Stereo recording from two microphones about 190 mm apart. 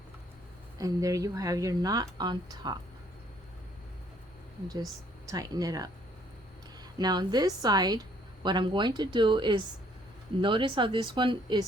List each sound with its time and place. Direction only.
0.8 s speech: 20° right (ahead or behind)
5.3 s speech: 20° right (ahead or behind)
7.0 s speech: 20° right (ahead or behind)